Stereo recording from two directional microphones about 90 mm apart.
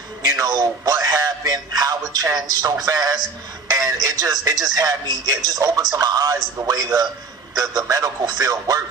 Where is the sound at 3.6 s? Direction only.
45° right (ahead or behind).